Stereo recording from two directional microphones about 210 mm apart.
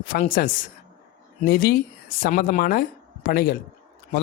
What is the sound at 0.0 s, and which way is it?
A man's voice, 40° left (ahead or behind).